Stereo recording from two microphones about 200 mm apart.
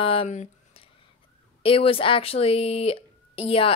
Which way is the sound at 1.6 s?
25° left (ahead or behind).